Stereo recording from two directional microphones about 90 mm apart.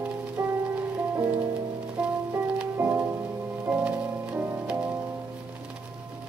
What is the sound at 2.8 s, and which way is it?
Music, 20° right (ahead or behind).